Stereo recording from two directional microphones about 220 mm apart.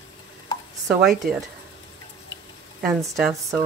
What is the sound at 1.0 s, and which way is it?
Speech, centre (ahead or behind).